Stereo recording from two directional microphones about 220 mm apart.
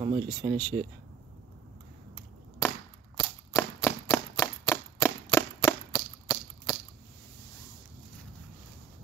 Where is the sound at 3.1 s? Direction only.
15° left (ahead or behind).